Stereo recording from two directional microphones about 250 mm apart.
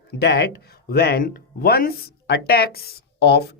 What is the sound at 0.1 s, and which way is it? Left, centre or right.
Speech, left.